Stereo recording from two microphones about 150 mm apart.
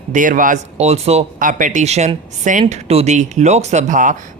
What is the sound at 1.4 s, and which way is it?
Speech, 60° right (ahead or behind).